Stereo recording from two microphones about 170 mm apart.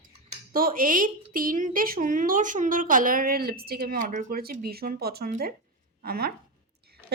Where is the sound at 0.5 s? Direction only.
55° right (ahead or behind).